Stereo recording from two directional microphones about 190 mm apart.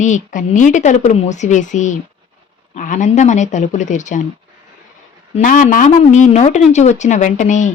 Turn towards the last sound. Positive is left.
turn(degrees=40)  # may be behind; listen again after turning